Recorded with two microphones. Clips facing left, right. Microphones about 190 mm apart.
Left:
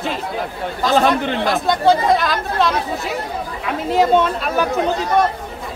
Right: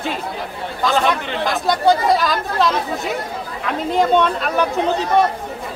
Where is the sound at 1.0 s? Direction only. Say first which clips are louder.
Left 6 dB; 40° left (ahead or behind).